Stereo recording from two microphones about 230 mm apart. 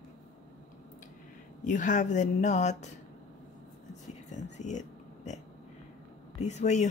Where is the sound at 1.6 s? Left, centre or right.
Left.